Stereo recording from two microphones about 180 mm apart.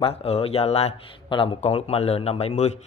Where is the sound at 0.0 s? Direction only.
35° left (ahead or behind).